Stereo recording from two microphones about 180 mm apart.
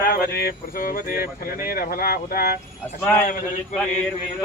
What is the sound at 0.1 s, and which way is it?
Speech, 60° left (ahead or behind).